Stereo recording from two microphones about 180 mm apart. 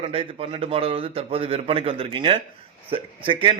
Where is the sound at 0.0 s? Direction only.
30° right (ahead or behind).